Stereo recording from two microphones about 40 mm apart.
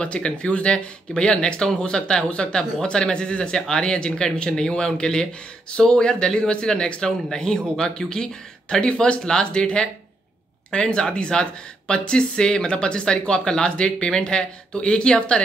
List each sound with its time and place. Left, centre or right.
0.0 s speech: left